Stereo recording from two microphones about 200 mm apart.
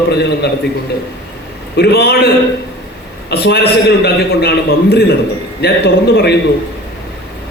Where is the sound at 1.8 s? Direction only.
55° left (ahead or behind).